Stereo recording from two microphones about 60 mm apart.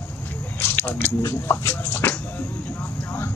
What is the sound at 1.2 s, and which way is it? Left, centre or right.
Speech, left.